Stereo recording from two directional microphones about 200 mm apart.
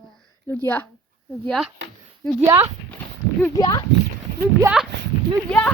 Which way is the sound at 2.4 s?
20° right (ahead or behind).